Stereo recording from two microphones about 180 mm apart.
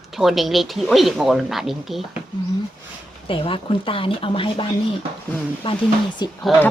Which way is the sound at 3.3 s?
30° left (ahead or behind).